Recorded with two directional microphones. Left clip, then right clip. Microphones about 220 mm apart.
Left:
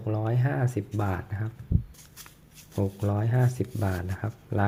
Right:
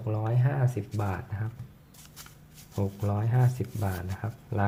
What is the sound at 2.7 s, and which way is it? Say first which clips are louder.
Speech: left 3 dB; 15° left (ahead or behind).